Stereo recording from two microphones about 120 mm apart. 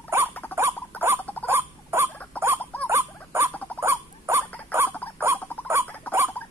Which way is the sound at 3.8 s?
20° right (ahead or behind).